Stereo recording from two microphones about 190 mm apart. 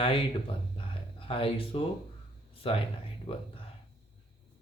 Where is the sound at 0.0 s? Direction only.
30° left (ahead or behind).